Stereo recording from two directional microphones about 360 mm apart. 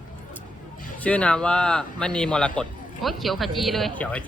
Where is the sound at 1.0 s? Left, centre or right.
Centre.